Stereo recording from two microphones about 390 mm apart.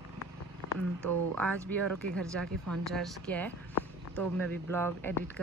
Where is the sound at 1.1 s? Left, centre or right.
Right.